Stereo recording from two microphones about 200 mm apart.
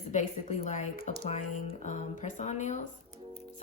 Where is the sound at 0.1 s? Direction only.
35° left (ahead or behind).